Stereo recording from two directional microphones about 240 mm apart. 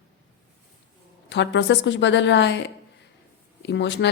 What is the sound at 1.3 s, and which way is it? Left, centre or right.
A woman's voice, left.